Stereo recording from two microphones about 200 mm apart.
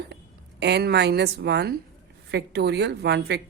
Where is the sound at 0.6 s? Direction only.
55° right (ahead or behind).